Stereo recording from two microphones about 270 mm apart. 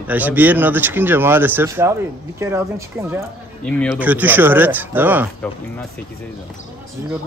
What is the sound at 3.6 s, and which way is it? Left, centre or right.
Speech, centre.